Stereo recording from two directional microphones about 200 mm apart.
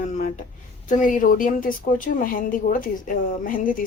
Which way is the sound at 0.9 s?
40° left (ahead or behind).